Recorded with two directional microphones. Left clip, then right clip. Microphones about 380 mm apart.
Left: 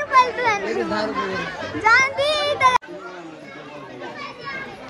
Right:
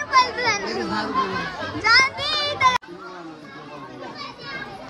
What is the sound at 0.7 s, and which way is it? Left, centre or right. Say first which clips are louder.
Speech: left 3 dB; centre.